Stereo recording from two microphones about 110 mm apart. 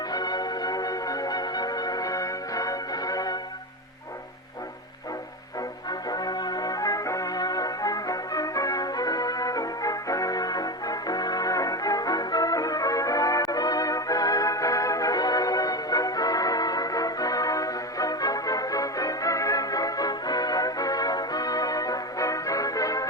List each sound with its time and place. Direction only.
0.1 s music: 35° left (ahead or behind)
6.1 s music: 35° left (ahead or behind)